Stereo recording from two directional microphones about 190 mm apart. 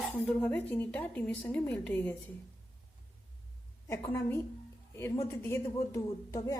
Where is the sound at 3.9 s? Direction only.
15° left (ahead or behind).